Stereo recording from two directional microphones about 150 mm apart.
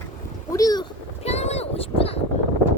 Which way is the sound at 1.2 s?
45° left (ahead or behind).